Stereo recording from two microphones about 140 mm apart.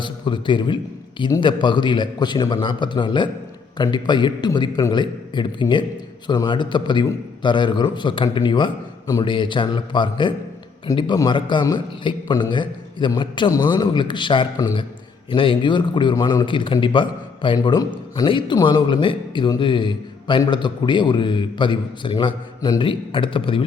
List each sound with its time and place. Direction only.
0.0 s a man's voice: 35° left (ahead or behind)